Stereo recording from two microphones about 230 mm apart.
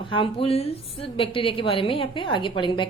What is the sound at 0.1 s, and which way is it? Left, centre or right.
A woman's voice, left.